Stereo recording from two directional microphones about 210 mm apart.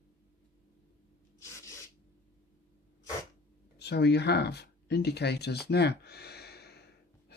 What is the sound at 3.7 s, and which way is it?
Speech, 50° left (ahead or behind).